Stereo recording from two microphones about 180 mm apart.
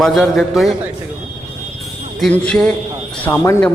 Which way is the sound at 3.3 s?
15° left (ahead or behind).